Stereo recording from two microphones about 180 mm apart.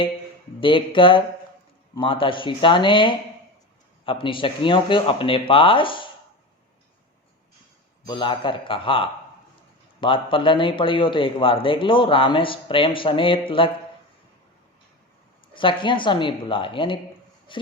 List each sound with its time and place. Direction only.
0.6 s a man's voice: 30° left (ahead or behind)
8.0 s a man's voice: 25° left (ahead or behind)
15.5 s a man's voice: 30° left (ahead or behind)